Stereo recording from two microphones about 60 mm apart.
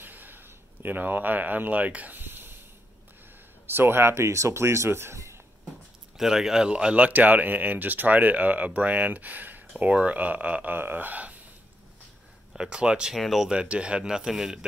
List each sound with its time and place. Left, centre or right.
0.0 s a sound: right
3.6 s speech: right
6.1 s speech: centre
7.1 s speech: right
12.5 s speech: centre
13.1 s speech: centre
13.5 s speech: centre